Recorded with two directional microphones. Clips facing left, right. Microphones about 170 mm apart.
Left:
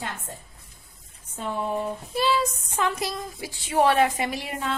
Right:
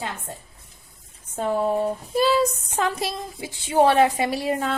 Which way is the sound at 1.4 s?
45° right (ahead or behind).